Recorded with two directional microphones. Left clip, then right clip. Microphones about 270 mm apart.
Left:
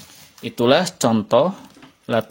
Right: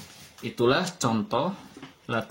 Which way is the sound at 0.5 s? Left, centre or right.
Left.